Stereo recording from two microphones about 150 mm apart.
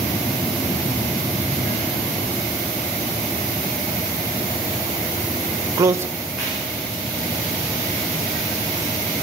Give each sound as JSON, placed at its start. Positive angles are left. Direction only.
{"t": 5.8, "sound": "speech", "side_deg": -20}